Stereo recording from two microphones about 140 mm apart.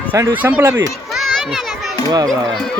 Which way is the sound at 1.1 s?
Centre (ahead or behind).